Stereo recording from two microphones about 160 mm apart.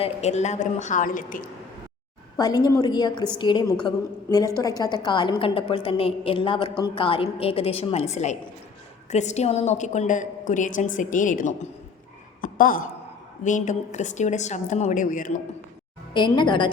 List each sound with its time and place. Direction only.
0.0 s a woman's voice: 45° left (ahead or behind); by 1.5 s 60° left (ahead or behind)
2.4 s a woman's voice: 25° left (ahead or behind); by 11.7 s 55° left (ahead or behind)
12.4 s a sound: 60° left (ahead or behind)
13.4 s a woman's voice: 50° left (ahead or behind)
16.1 s a woman's voice: 30° left (ahead or behind)